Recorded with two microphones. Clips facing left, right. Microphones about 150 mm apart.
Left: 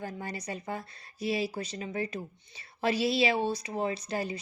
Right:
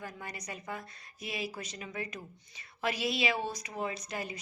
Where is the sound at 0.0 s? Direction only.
30° left (ahead or behind).